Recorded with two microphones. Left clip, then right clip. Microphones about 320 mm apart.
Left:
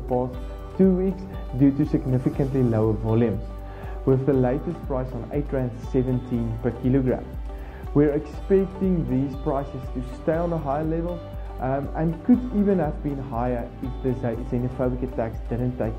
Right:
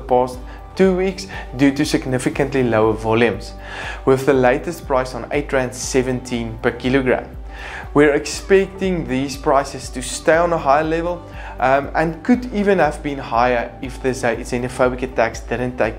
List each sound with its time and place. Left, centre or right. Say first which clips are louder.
0.7 s speech: right 6 dB; centre